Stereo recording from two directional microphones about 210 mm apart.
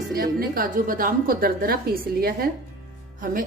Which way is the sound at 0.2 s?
45° right (ahead or behind).